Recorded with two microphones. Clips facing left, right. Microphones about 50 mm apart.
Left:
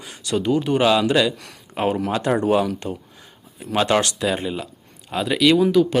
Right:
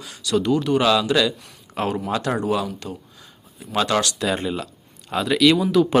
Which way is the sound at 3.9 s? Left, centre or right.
Left.